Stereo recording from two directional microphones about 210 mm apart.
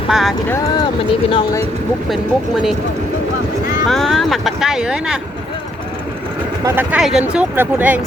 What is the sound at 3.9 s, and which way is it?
Speech, centre (ahead or behind).